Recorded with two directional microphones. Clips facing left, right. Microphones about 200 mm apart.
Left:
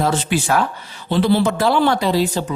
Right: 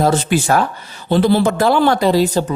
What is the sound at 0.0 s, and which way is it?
Speech, 40° right (ahead or behind).